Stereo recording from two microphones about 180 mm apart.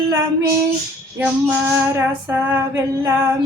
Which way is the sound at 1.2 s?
10° right (ahead or behind).